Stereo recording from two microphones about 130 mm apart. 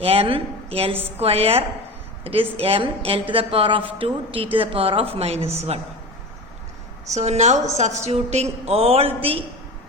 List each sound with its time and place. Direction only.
0.0 s a woman's voice: 45° right (ahead or behind)
7.1 s a woman's voice: 60° right (ahead or behind)